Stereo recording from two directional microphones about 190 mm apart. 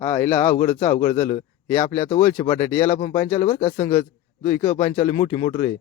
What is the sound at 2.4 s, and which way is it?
Speech, 10° left (ahead or behind).